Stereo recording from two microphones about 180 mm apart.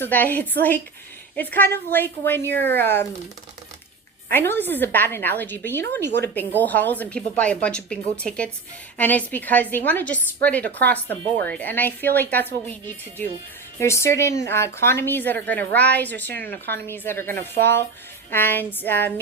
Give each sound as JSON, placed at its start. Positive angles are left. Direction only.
{"t": 0.0, "sound": "a woman's voice", "side_deg": 10}
{"t": 4.3, "sound": "a woman's voice", "side_deg": 10}
{"t": 6.1, "sound": "speech", "side_deg": -70}
{"t": 6.3, "sound": "a woman's voice", "side_deg": 10}